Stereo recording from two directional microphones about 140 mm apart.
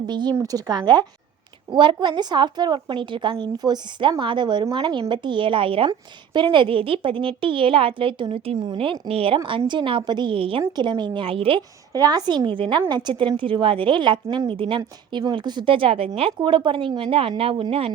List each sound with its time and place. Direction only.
0.0 s a woman's voice: 30° right (ahead or behind)
11.9 s a woman's voice: 30° right (ahead or behind)